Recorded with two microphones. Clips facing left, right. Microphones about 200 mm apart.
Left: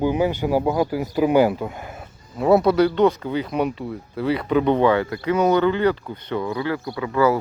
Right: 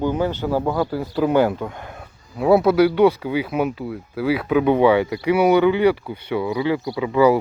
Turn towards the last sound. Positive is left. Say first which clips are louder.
# right 3 dB
turn(degrees=-15)  # may be behind; listen again after turning